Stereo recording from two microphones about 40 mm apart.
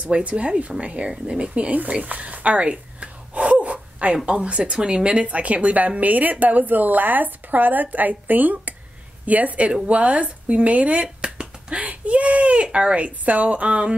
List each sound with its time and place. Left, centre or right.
0.0 s a woman's voice: right
2.7 s gasp: right
4.3 s a woman's voice: right
11.2 s finger snapping: right
11.8 s baby cry: right
12.6 s speech: right
12.9 s a woman's voice: right